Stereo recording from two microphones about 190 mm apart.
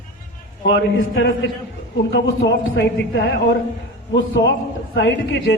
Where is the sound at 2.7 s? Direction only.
60° left (ahead or behind).